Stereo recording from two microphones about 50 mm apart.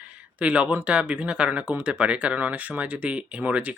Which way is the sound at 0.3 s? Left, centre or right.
Right.